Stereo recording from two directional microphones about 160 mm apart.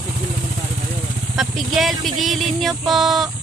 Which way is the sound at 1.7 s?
Centre (ahead or behind).